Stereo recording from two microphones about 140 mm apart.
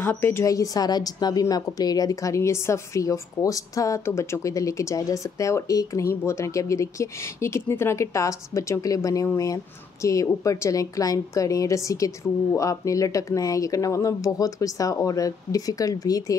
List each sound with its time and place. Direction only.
0.0 s a woman's voice: 15° left (ahead or behind)